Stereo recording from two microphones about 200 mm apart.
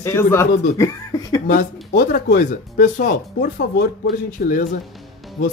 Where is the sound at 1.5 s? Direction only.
45° left (ahead or behind).